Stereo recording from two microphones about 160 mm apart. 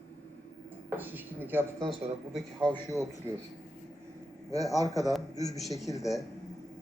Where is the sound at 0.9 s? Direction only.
10° right (ahead or behind).